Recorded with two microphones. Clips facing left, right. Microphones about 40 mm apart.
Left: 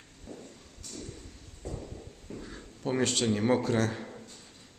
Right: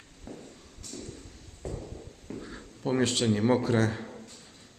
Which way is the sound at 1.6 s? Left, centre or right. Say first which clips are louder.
Right 2 dB; right.